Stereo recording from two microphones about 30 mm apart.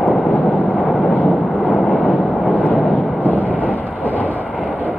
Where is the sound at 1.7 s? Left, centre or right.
Left.